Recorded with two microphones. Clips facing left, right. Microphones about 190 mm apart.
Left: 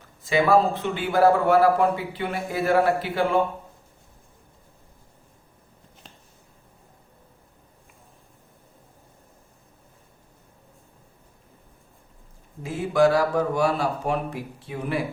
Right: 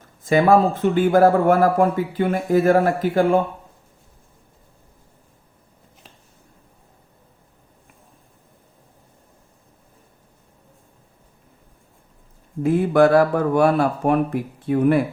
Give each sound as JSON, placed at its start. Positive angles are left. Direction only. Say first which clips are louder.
{"t": 0.0, "sound": "speech", "louder": "right 5 dB", "side_deg": -50}
{"t": 12.6, "sound": "speech", "louder": "right 5 dB", "side_deg": -55}